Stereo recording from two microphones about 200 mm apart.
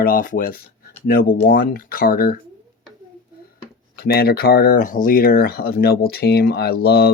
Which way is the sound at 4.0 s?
50° left (ahead or behind).